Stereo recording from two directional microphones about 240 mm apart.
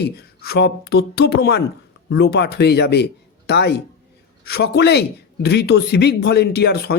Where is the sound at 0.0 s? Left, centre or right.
Left.